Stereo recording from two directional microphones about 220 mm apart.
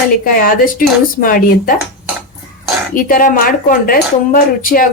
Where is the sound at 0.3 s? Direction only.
40° left (ahead or behind).